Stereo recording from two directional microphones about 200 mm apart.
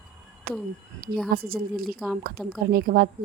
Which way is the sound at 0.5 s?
50° right (ahead or behind).